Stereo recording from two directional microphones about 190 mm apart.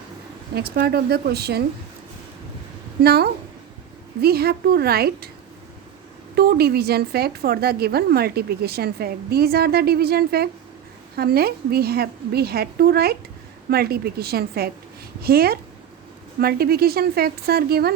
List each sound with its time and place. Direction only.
0.5 s a woman's voice: 55° right (ahead or behind)
3.0 s a woman's voice: 55° right (ahead or behind)
6.3 s a woman's voice: 55° right (ahead or behind)